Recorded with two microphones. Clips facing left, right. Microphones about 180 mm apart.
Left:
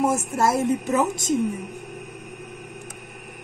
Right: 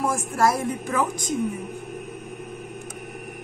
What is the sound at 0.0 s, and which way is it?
A woman's voice, 25° left (ahead or behind).